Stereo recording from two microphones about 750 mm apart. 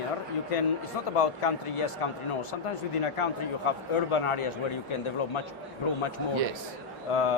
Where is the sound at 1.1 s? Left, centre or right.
Left.